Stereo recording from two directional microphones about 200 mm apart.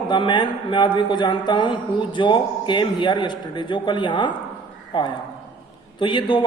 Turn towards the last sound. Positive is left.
turn(degrees=25)  # may be behind; listen again after turning